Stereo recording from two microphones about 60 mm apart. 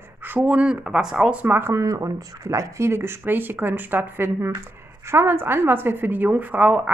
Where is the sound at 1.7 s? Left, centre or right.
Right.